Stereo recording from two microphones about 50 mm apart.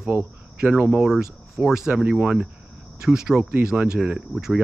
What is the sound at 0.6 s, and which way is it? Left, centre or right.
Speech, centre.